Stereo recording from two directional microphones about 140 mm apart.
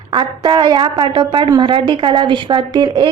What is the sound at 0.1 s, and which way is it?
A woman's voice, 35° right (ahead or behind).